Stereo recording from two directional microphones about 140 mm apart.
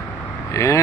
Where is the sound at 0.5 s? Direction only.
20° left (ahead or behind).